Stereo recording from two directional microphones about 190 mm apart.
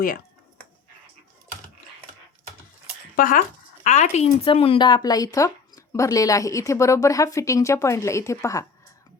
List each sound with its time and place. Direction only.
3.2 s speech: 45° left (ahead or behind); by 8.6 s 15° left (ahead or behind)